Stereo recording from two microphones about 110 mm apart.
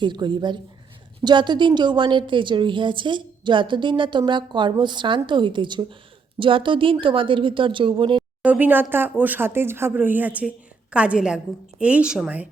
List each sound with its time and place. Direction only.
0.0 s a woman's voice: 45° right (ahead or behind)
8.4 s speech: 15° right (ahead or behind)